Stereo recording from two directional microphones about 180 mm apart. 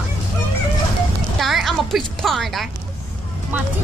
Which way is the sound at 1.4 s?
Centre (ahead or behind).